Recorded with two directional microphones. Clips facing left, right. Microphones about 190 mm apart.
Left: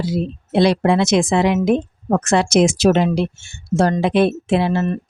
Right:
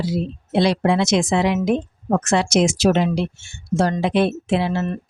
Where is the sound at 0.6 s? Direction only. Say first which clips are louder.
Left 3 dB; 55° left (ahead or behind).